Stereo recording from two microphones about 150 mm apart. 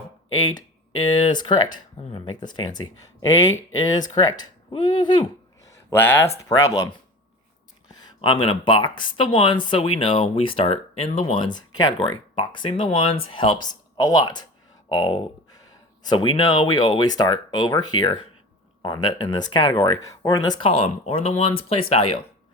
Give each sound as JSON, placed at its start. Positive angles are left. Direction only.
{"t": 2.0, "sound": "speech", "side_deg": 40}
{"t": 2.3, "sound": "speech", "side_deg": 30}
{"t": 5.9, "sound": "speech", "side_deg": 15}
{"t": 7.9, "sound": "speech", "side_deg": 30}